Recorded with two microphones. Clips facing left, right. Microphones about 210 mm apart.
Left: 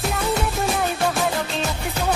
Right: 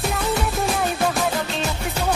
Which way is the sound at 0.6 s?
Centre (ahead or behind).